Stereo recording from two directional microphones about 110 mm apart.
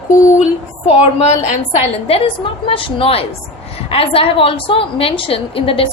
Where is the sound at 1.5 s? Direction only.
80° left.